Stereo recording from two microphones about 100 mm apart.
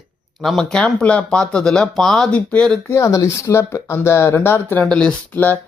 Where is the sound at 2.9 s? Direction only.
30° left (ahead or behind).